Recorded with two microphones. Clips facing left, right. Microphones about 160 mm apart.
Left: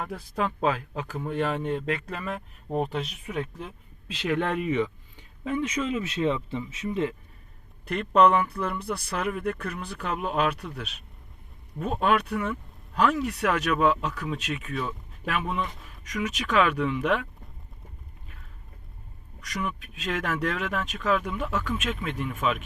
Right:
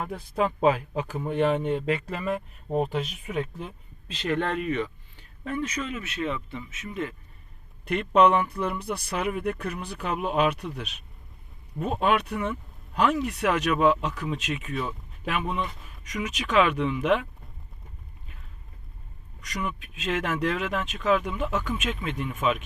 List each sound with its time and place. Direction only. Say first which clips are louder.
0.0 s speech: right 3 dB; centre (ahead or behind); by 7.1 s 25° left (ahead or behind)
7.9 s speech: even; 5° right (ahead or behind)
19.6 s speech: right 2 dB; centre (ahead or behind)